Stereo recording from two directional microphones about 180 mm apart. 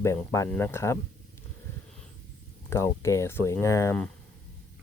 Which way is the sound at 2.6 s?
15° left (ahead or behind).